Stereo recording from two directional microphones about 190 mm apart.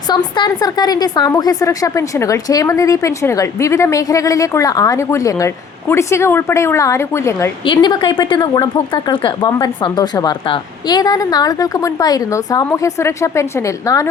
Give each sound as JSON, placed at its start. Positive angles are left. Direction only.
{"t": 0.1, "sound": "a woman's voice", "side_deg": 20}